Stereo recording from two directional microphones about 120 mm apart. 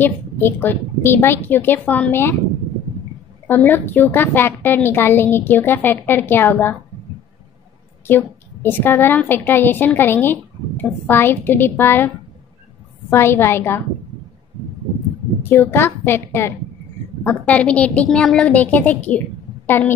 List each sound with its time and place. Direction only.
0.0 s a woman's voice: 15° left (ahead or behind)
3.4 s a woman's voice: 15° left (ahead or behind)
8.1 s a woman's voice: 15° left (ahead or behind)
13.1 s a woman's voice: 20° left (ahead or behind)
15.4 s a woman's voice: 20° left (ahead or behind)